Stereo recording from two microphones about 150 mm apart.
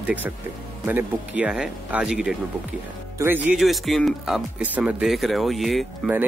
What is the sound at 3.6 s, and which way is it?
Speech, centre (ahead or behind).